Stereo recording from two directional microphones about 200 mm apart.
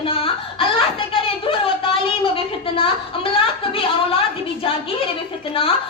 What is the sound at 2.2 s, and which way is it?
A woman's voice, 25° left (ahead or behind).